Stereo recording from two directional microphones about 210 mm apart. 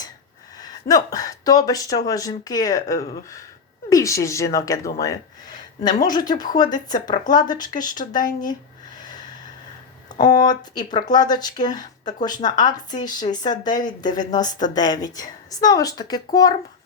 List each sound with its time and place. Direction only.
0.6 s speech: 15° left (ahead or behind)
10.1 s a sound: 20° left (ahead or behind)
10.8 s speech: 20° left (ahead or behind)